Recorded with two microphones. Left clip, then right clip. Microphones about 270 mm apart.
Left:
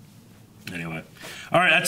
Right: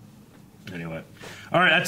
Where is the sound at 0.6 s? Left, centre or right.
Right.